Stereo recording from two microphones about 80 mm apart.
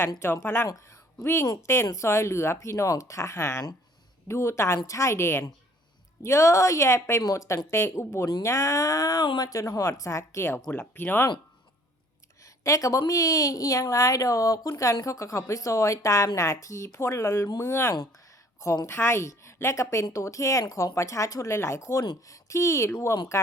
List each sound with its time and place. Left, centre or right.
0.2 s a woman's voice: left
12.6 s a woman's voice: left